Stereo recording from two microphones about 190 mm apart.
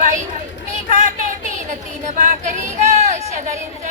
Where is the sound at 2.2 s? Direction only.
40° right (ahead or behind).